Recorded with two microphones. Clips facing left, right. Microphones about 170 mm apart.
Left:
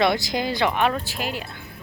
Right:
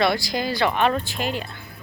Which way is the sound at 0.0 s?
20° left (ahead or behind).